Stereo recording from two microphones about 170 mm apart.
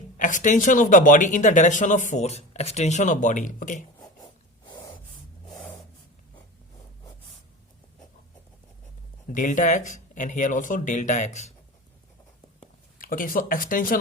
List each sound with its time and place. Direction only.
0.2 s speech: 50° left (ahead or behind)
4.6 s snort: 25° left (ahead or behind)
5.5 s a sound: centre (ahead or behind)
9.3 s speech: 50° left (ahead or behind)
13.0 s speech: 55° left (ahead or behind)